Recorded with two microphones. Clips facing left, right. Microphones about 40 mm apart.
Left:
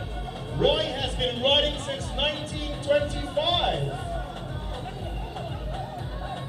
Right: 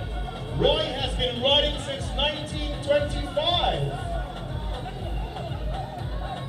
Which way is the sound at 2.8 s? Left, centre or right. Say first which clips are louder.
Even; centre.